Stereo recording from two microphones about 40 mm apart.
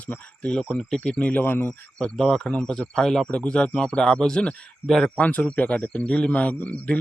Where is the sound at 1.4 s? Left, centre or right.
Left.